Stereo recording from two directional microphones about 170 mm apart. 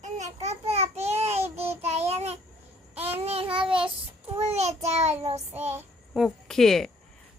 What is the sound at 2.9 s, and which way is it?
Babbling, 35° right (ahead or behind).